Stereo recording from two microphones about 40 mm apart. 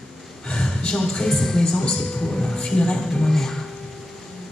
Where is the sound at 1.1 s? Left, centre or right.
Centre.